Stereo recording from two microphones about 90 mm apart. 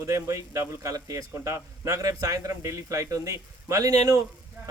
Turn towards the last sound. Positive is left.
turn(degrees=-40)  # may be behind; listen again after turning